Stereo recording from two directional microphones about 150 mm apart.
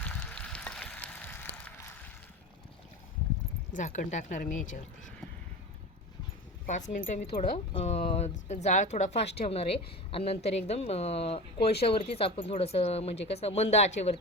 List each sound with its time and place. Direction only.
0.0 s a sound: 10° left (ahead or behind)
3.7 s speech: 55° left (ahead or behind)
6.7 s speech: 55° left (ahead or behind)
7.5 s speech: 40° left (ahead or behind)